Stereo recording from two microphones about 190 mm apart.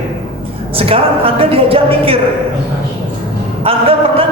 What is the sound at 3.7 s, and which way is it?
Speech, 30° right (ahead or behind).